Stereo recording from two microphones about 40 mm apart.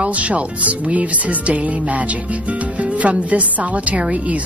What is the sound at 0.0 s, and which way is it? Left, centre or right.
Speech, right.